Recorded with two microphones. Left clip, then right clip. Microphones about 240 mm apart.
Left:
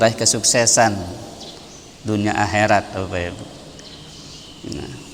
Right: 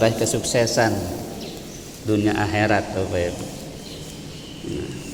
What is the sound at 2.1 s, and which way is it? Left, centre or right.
Speech, left.